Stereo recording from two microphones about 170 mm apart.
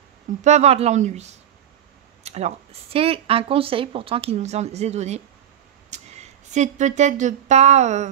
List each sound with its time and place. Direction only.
0.4 s speech: 40° right (ahead or behind)